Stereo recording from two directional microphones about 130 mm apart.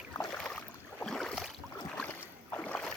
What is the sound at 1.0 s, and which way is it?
Boat, 5° left (ahead or behind).